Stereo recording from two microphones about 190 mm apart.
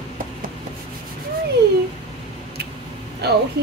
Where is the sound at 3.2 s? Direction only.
55° right (ahead or behind).